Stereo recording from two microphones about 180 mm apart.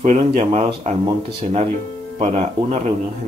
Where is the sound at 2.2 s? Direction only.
40° right (ahead or behind).